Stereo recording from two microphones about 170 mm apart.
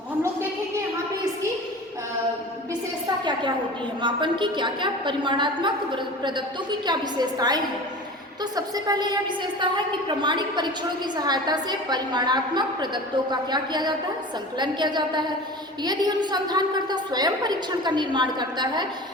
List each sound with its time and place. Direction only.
4.0 s a woman's voice: 30° right (ahead or behind)